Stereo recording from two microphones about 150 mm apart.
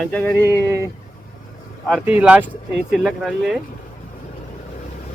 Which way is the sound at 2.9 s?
Centre (ahead or behind).